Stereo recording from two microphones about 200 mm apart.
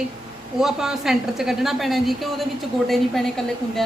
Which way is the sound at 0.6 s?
Centre (ahead or behind).